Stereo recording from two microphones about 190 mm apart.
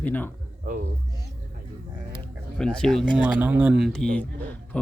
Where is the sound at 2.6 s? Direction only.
5° left (ahead or behind).